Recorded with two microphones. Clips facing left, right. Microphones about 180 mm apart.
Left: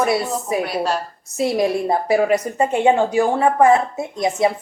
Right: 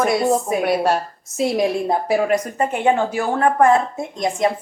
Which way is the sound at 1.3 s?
Centre (ahead or behind).